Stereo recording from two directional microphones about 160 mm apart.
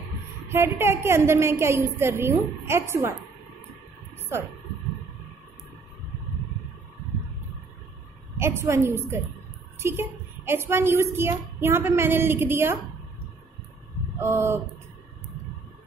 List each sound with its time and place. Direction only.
0.5 s a woman's voice: 15° right (ahead or behind)
8.4 s a woman's voice: 15° right (ahead or behind)
14.2 s a woman's voice: 15° right (ahead or behind)